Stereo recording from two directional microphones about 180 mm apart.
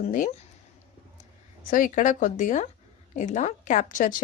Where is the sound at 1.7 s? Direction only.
45° left (ahead or behind).